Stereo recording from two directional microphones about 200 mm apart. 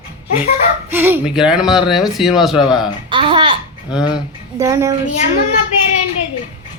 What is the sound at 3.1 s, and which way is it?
Speech, 25° right (ahead or behind).